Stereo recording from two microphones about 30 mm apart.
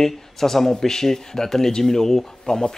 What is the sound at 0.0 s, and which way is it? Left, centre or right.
Speech, centre.